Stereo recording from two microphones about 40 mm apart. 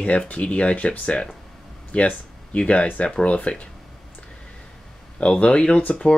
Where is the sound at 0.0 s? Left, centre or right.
Left.